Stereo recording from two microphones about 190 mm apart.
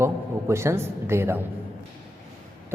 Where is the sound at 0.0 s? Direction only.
15° right (ahead or behind).